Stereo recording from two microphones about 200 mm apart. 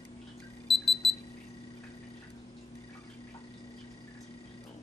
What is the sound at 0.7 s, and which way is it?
Alarm clock, centre (ahead or behind).